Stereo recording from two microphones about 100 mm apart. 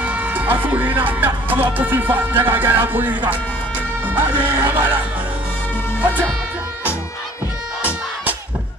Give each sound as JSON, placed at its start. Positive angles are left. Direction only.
{"t": 0.0, "sound": "speech", "side_deg": -15}
{"t": 4.4, "sound": "music", "side_deg": -15}
{"t": 5.9, "sound": "speech", "side_deg": -15}